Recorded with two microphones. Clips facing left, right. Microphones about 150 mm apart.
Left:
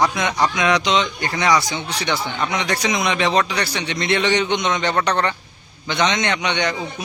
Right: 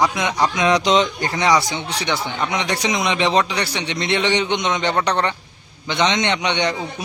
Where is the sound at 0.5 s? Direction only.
30° right (ahead or behind).